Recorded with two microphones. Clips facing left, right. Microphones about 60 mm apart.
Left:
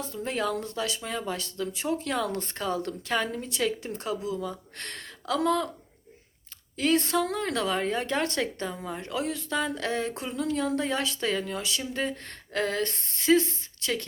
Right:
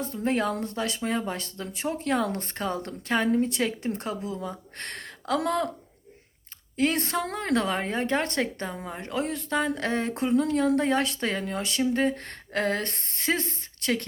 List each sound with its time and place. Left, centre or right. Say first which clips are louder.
0.0 s a woman's voice: right 3 dB; right
6.7 s a woman's voice: left 1 dB; right